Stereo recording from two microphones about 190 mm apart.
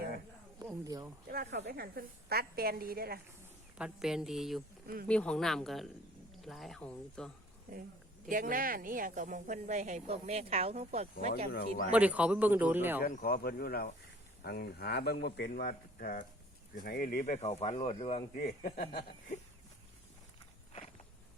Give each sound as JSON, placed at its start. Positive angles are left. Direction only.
{"t": 0.6, "sound": "speech", "side_deg": -20}
{"t": 1.3, "sound": "a woman's voice", "side_deg": -60}
{"t": 3.8, "sound": "speech", "side_deg": -5}
{"t": 8.3, "sound": "speech", "side_deg": -45}
{"t": 11.5, "sound": "speech", "side_deg": 50}
{"t": 11.9, "sound": "speech", "side_deg": -5}
{"t": 13.0, "sound": "speech", "side_deg": 50}
{"t": 18.3, "sound": "speech", "side_deg": 50}